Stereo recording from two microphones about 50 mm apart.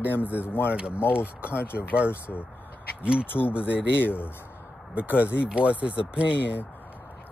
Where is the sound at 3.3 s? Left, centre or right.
Left.